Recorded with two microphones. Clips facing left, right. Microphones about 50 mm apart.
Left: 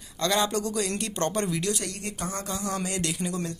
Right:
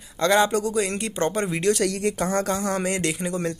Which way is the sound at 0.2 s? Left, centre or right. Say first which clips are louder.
Right 6 dB; right.